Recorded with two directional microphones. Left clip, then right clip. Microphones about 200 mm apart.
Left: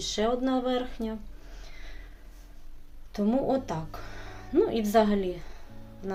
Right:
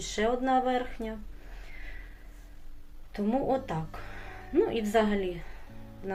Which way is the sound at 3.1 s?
25° left (ahead or behind).